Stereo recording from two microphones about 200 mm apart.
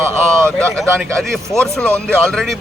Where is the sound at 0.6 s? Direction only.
Centre (ahead or behind).